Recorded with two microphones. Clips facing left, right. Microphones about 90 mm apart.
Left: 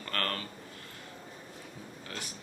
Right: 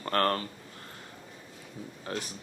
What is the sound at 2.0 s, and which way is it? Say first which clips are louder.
Speech: right 8 dB; 35° right (ahead or behind).